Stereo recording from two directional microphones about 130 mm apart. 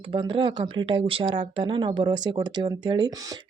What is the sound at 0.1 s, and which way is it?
Speech, 40° right (ahead or behind).